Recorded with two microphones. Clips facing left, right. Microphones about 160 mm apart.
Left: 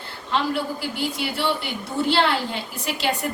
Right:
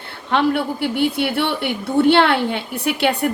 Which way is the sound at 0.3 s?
60° right (ahead or behind).